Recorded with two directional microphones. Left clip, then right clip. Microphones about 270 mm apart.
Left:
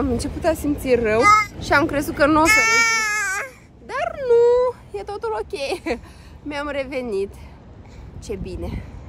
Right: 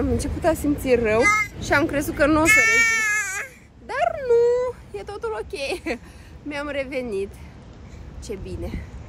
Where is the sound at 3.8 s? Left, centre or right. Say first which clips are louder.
Left 1 dB; centre.